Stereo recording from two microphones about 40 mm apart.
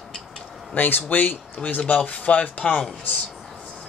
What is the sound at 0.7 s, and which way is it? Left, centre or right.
Speech, left.